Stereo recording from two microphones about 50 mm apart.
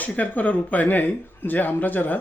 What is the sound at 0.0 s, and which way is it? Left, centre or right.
Speech, left.